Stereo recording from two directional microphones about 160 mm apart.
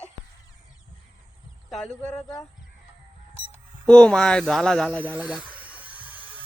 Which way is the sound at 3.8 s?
5° left (ahead or behind).